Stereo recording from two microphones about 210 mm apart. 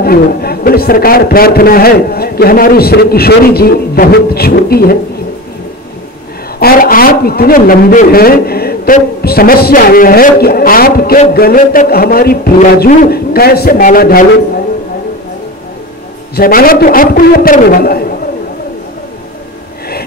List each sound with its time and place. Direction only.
0.0 s a man's voice: 45° left (ahead or behind)
6.6 s a man's voice: 45° left (ahead or behind)
16.3 s a man's voice: 45° left (ahead or behind)